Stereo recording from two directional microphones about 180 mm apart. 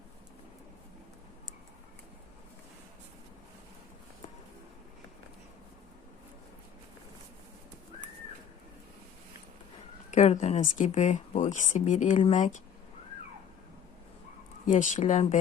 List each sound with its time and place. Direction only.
10.1 s speech: 40° left (ahead or behind)
14.7 s speech: 40° left (ahead or behind)